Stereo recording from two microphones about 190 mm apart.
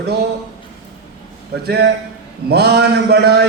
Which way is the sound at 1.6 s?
60° right (ahead or behind).